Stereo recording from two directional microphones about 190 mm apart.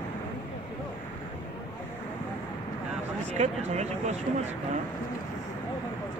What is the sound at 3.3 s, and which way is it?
Speech, 35° right (ahead or behind).